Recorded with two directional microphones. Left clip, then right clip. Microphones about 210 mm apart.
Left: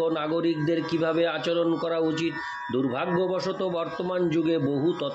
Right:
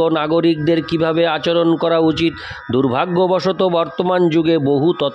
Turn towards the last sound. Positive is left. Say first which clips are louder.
# right 10 dB
turn(degrees=-50)  # may be behind; listen again after turning